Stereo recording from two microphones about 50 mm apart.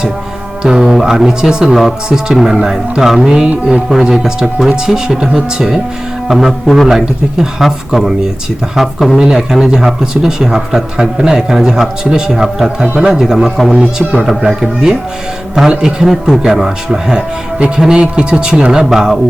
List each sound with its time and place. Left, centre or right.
0.6 s speech: centre
9.1 s speech: centre
16.0 s speech: centre